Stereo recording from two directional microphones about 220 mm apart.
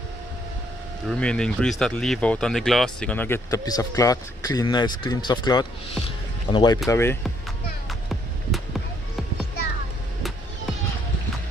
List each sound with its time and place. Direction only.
1.0 s speech: 5° left (ahead or behind)
8.1 s music: centre (ahead or behind)